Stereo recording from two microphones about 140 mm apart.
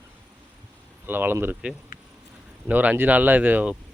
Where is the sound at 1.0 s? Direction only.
15° right (ahead or behind).